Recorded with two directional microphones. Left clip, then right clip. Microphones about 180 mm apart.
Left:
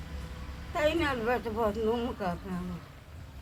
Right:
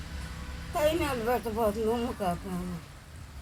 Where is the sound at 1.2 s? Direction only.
40° right (ahead or behind).